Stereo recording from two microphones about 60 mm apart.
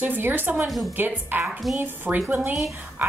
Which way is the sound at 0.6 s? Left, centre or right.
Centre.